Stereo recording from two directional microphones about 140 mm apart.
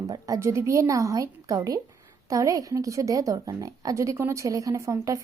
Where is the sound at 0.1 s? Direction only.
20° right (ahead or behind).